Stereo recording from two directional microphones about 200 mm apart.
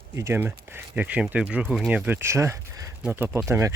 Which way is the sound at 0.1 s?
15° right (ahead or behind).